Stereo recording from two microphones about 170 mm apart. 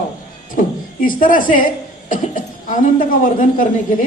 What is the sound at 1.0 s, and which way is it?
A man's voice, 55° left (ahead or behind).